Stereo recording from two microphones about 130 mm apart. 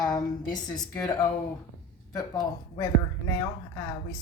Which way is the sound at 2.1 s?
30° left (ahead or behind).